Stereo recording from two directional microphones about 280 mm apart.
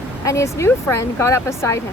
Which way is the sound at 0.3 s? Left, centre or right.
Centre.